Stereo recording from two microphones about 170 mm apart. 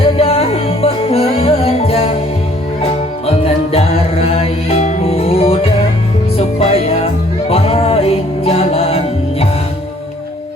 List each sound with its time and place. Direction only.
0.0 s music: 35° left (ahead or behind)
3.2 s music: 35° left (ahead or behind)